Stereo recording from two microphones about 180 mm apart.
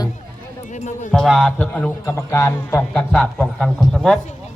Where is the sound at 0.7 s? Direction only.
45° left (ahead or behind).